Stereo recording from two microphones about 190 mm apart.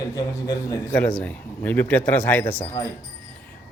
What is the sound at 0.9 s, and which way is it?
A man's voice, 5° left (ahead or behind).